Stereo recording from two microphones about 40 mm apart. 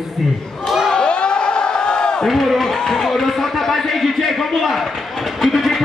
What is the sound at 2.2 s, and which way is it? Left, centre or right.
A man's voice, centre.